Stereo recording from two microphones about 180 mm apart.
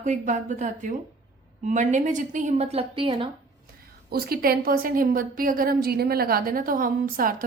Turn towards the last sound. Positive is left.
turn(degrees=-50)  # may be behind; listen again after turning